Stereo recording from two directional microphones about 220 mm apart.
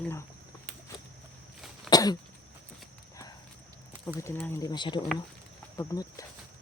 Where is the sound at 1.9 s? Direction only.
20° left (ahead or behind).